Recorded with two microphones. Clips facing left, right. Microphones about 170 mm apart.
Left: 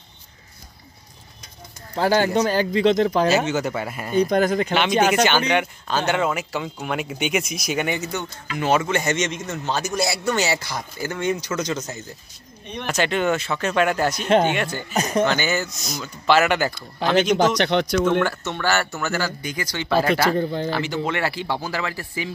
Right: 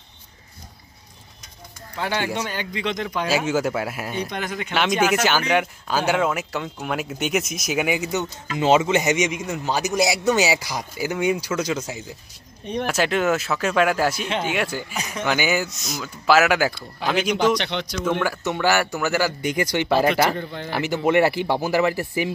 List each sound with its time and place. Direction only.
2.0 s speech: 35° left (ahead or behind)
3.3 s speech: 5° right (ahead or behind)
4.3 s speech: 40° left (ahead or behind)
5.1 s speech: 5° right (ahead or behind)
8.5 s a man's voice: 20° right (ahead or behind)
15.0 s a man's voice: 45° left (ahead or behind)
15.2 s a man's voice: 10° right (ahead or behind)
17.6 s a man's voice: 50° left (ahead or behind)
18.2 s a man's voice: 10° right (ahead or behind)
20.3 s speech: 35° left (ahead or behind)
20.7 s a man's voice: 15° right (ahead or behind)